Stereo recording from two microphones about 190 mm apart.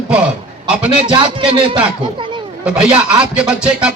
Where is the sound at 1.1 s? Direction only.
25° right (ahead or behind).